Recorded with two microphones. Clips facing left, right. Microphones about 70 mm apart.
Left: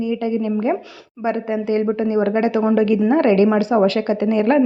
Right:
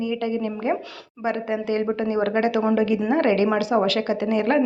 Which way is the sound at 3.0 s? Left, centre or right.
Left.